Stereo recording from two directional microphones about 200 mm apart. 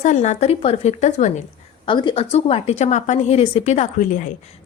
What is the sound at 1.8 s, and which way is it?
A woman's voice, 25° left (ahead or behind).